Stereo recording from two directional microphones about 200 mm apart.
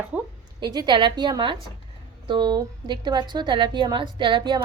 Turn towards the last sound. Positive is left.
turn(degrees=-25)  # may be behind; listen again after turning